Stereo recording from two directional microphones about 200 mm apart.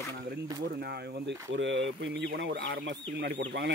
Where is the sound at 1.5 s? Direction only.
65° right (ahead or behind).